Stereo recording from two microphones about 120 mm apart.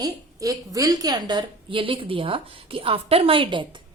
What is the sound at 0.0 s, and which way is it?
Speech, 30° right (ahead or behind).